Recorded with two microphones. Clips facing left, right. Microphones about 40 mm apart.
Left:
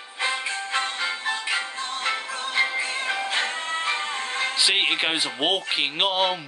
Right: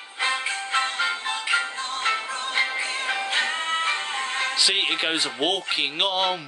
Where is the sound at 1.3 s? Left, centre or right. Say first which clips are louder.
Right 2 dB; right.